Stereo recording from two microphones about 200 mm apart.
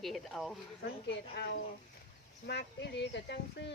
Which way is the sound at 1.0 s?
60° left (ahead or behind).